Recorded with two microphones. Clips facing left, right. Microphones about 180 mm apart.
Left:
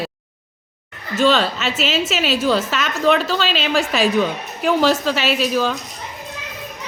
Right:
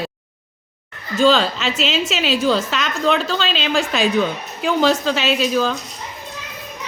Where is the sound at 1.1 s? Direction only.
5° left (ahead or behind).